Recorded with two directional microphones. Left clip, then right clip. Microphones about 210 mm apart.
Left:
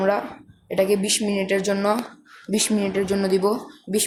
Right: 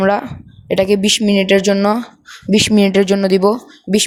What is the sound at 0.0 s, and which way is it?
Speech, 45° right (ahead or behind).